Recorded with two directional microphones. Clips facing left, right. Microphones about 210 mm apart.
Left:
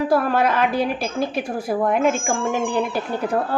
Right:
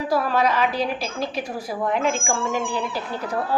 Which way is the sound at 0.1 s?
55° left (ahead or behind).